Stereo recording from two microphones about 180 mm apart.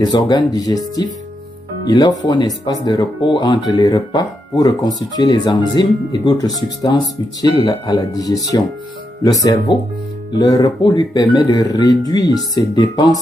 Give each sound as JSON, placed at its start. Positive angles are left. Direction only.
{"t": 0.0, "sound": "speech", "side_deg": 25}